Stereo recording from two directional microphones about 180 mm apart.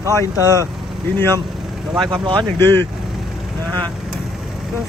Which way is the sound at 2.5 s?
10° left (ahead or behind).